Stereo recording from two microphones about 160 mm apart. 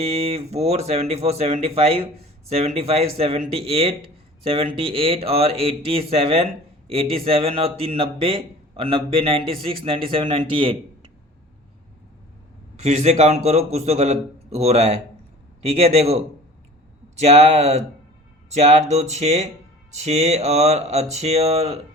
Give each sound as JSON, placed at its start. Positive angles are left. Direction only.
{"t": 0.0, "sound": "a man's voice", "side_deg": -40}
{"t": 12.7, "sound": "a man's voice", "side_deg": -40}